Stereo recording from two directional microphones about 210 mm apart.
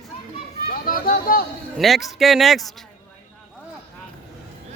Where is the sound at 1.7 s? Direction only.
Centre (ahead or behind).